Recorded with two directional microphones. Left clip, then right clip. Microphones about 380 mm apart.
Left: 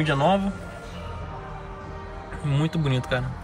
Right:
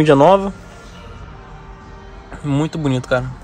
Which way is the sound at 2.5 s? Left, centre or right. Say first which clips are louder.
Right 8 dB; centre.